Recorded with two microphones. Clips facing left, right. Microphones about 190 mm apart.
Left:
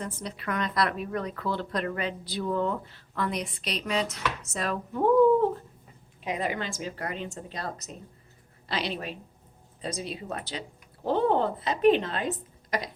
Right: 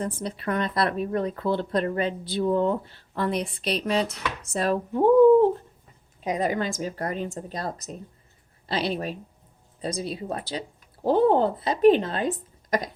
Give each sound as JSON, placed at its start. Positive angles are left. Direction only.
{"t": 0.0, "sound": "speech", "side_deg": -30}
{"t": 6.2, "sound": "a woman's voice", "side_deg": -40}